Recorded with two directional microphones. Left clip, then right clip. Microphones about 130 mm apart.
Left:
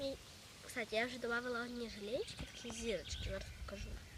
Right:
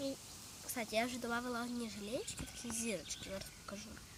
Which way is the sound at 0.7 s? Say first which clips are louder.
Right 1 dB; 20° left (ahead or behind).